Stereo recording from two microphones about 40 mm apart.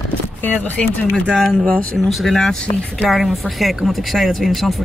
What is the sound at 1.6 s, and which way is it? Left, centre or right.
Speech, left.